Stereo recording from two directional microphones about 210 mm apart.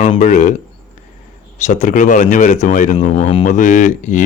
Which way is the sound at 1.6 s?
35° left (ahead or behind).